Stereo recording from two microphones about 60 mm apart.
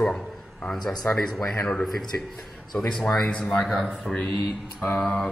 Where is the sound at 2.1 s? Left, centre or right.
Left.